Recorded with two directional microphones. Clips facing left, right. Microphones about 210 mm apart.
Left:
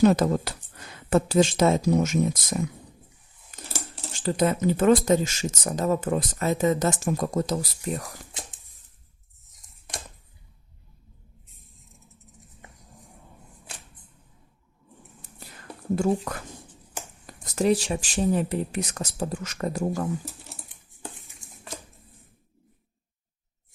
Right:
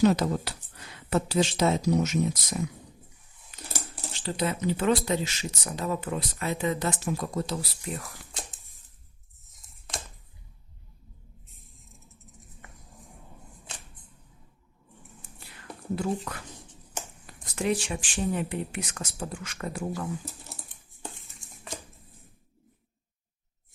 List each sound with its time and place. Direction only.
0.0 s speech: 50° left (ahead or behind)
4.1 s speech: 45° left (ahead or behind)
15.2 s whispering: 40° left (ahead or behind)
16.0 s speech: 45° left (ahead or behind)